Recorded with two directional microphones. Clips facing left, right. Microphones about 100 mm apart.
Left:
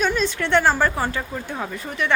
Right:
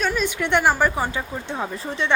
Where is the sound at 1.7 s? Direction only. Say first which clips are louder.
Left 1 dB; 30° right (ahead or behind).